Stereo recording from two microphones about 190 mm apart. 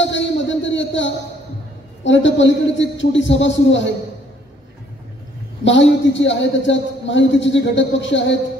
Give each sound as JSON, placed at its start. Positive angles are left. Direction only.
{"t": 0.0, "sound": "a sound", "side_deg": 70}
{"t": 2.0, "sound": "a man's voice", "side_deg": 75}
{"t": 5.6, "sound": "a man's voice", "side_deg": 70}